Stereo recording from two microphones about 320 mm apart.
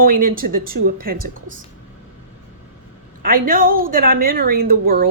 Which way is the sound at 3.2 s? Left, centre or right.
Right.